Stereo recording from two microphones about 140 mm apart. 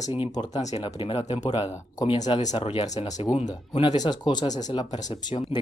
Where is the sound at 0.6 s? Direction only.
55° left (ahead or behind).